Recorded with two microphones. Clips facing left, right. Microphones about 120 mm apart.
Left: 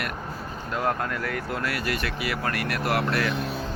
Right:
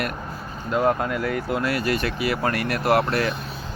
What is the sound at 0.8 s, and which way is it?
Speech, 15° right (ahead or behind).